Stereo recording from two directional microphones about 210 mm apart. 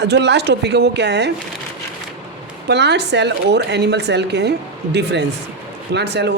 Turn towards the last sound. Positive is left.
turn(degrees=-55)  # may be behind; listen again after turning